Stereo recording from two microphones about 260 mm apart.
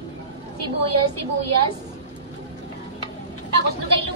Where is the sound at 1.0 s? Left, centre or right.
Right.